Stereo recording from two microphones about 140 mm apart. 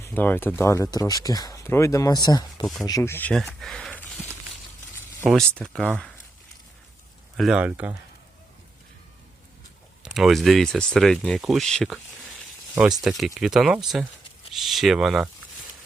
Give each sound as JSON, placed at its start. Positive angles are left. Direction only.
{"t": 0.0, "sound": "speech", "side_deg": 15}
{"t": 5.3, "sound": "speech", "side_deg": 5}
{"t": 7.3, "sound": "speech", "side_deg": -5}
{"t": 10.0, "sound": "speech", "side_deg": 0}
{"t": 12.7, "sound": "speech", "side_deg": -10}
{"t": 13.0, "sound": "speech", "side_deg": 0}